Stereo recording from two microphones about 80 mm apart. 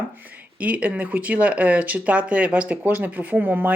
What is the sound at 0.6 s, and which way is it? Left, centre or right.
Speech, centre.